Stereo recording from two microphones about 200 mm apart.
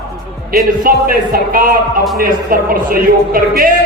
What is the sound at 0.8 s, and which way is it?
A man's voice, 45° right (ahead or behind).